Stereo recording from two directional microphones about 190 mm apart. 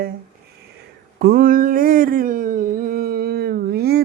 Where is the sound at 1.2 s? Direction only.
50° right (ahead or behind).